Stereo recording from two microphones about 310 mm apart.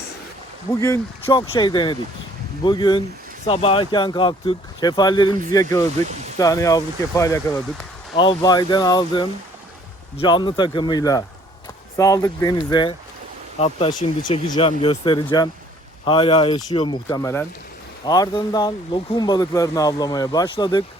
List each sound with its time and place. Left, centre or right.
0.7 s speech: centre